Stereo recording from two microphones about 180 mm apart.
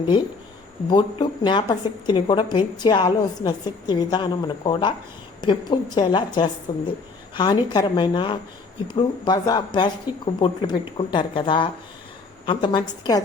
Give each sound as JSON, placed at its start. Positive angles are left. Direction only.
{"t": 0.9, "sound": "a woman's voice", "side_deg": 25}